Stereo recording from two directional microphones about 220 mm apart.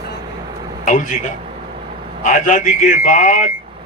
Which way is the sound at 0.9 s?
35° left (ahead or behind).